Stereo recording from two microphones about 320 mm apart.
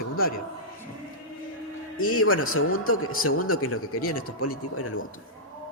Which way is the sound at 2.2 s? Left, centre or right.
Left.